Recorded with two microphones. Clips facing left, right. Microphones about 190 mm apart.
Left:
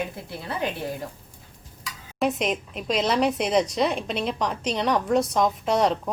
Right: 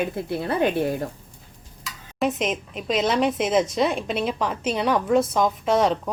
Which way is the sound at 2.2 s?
Centre (ahead or behind).